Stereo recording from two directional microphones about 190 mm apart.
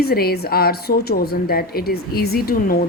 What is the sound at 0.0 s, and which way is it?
A woman's voice, 55° left (ahead or behind).